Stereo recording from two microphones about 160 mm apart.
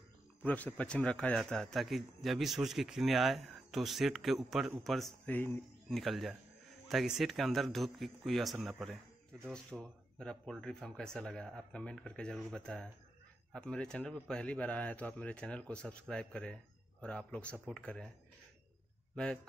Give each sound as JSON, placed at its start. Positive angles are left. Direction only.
{"t": 0.4, "sound": "a man's voice", "side_deg": 10}
{"t": 5.9, "sound": "a man's voice", "side_deg": 0}